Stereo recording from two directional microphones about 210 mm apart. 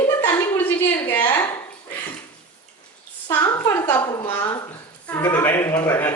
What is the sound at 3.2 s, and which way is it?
A man's voice, 15° left (ahead or behind).